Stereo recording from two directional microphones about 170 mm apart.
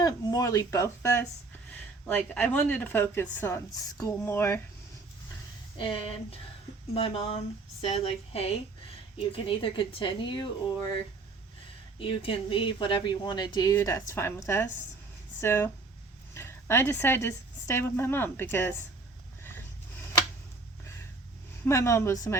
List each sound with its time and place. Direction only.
0.0 s speech: 20° left (ahead or behind)
5.7 s speech: 30° left (ahead or behind)
11.9 s speech: 30° left (ahead or behind); by 18.9 s 15° left (ahead or behind)
19.4 s vehicle: 15° left (ahead or behind)
21.6 s speech: 15° left (ahead or behind)